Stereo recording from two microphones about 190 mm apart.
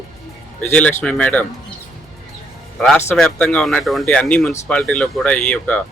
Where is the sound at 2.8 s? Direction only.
5° left (ahead or behind).